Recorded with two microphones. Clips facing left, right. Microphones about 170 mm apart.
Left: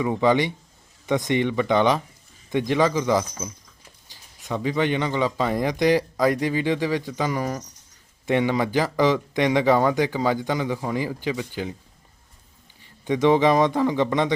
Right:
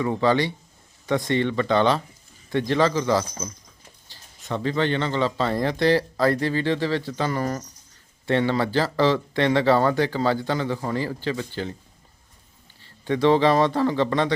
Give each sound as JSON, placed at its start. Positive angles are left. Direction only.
{"t": 0.0, "sound": "speech", "side_deg": 15}
{"t": 12.8, "sound": "speech", "side_deg": 15}